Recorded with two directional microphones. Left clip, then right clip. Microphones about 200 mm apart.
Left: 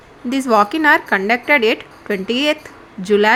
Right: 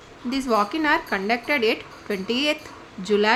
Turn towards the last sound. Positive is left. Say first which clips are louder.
# left 7 dB
turn(degrees=20)  # may be behind; listen again after turning